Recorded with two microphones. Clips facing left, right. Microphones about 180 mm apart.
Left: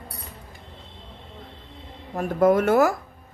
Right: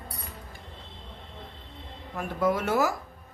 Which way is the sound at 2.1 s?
45° left (ahead or behind).